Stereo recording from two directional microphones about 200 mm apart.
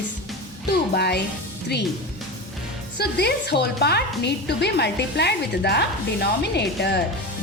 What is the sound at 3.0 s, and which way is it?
Speech, 55° left (ahead or behind).